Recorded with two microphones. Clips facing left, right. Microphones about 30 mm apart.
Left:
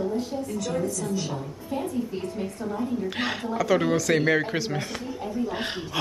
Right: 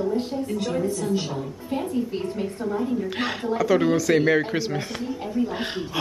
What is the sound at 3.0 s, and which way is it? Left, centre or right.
Speech, centre.